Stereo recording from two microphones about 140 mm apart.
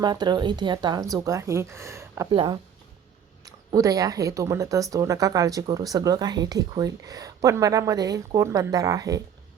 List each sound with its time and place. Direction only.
0.0 s speech: 30° right (ahead or behind)
2.3 s speech: 35° right (ahead or behind)